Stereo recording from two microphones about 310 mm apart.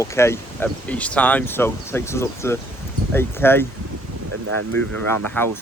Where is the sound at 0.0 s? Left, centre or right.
Centre.